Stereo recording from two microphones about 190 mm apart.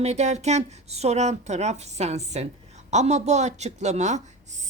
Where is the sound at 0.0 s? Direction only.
35° right (ahead or behind).